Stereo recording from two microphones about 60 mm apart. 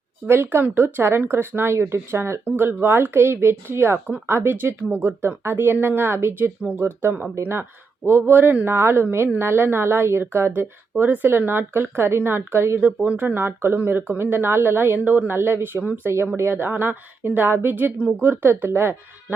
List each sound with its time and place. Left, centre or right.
0.3 s a woman's voice: right
12.8 s a woman's voice: right